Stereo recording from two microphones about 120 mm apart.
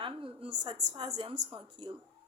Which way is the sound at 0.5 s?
35° right (ahead or behind).